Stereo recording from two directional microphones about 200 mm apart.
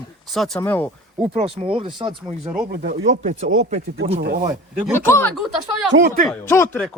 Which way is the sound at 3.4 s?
35° right (ahead or behind).